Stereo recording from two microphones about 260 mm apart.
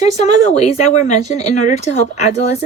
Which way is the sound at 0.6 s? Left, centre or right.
Left.